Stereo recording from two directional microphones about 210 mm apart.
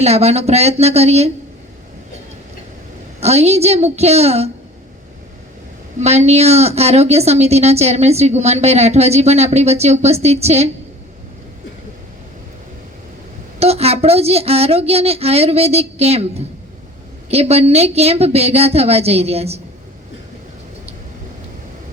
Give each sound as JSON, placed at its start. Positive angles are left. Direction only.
{"t": 0.0, "sound": "a woman's voice", "side_deg": -30}
{"t": 3.2, "sound": "a woman's voice", "side_deg": -30}
{"t": 6.0, "sound": "a woman's voice", "side_deg": -30}
{"t": 13.6, "sound": "a woman's voice", "side_deg": -30}